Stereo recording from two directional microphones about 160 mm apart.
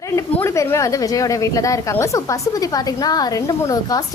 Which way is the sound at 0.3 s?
20° left (ahead or behind).